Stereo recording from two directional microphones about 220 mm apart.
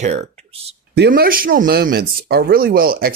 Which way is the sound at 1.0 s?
45° right (ahead or behind).